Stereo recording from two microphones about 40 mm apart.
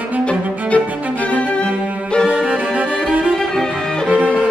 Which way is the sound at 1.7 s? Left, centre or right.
Right.